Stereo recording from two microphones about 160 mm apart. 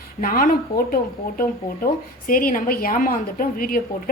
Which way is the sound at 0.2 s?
65° left (ahead or behind).